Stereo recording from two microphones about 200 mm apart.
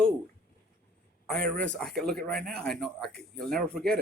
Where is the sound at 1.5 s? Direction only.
5° left (ahead or behind).